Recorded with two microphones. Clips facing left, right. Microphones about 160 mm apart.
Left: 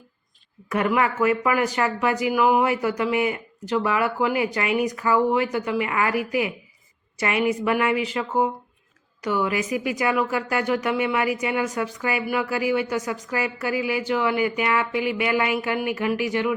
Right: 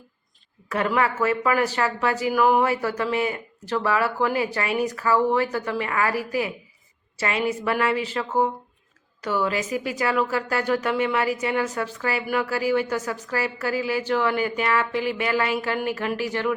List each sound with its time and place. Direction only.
0.7 s speech: 15° left (ahead or behind)